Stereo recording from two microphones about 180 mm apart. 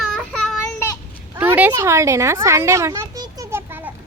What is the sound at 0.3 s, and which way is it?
Child singing, centre (ahead or behind).